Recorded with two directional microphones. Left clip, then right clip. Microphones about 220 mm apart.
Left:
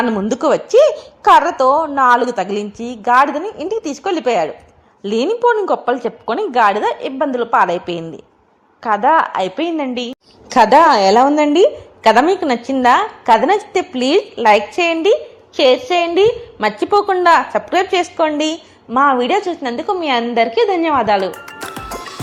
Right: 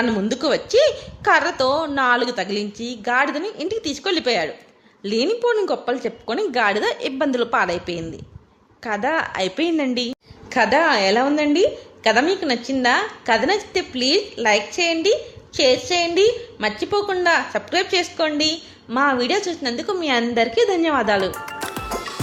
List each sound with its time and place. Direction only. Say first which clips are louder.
0.4 s a woman's voice: left 6 dB; 10° left (ahead or behind)
1.2 s a woman's voice: left 7 dB; centre (ahead or behind)
2.1 s a woman's voice: left 6 dB; 10° left (ahead or behind)
5.0 s a woman's voice: left 5 dB; 10° left (ahead or behind); by 10.2 s 5° right (ahead or behind)
10.5 s a woman's voice: left 8 dB; 30° left (ahead or behind); by 18.5 s 10° left (ahead or behind)
18.9 s a woman's voice: left 6 dB; centre (ahead or behind)